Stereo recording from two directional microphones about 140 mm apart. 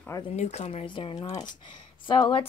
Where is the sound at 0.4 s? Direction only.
50° left (ahead or behind).